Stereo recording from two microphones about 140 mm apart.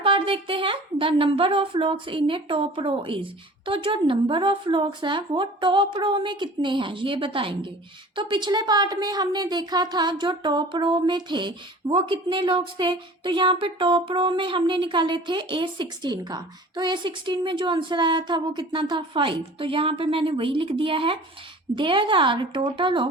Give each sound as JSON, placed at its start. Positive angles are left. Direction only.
{"t": 0.0, "sound": "a woman's voice", "side_deg": -40}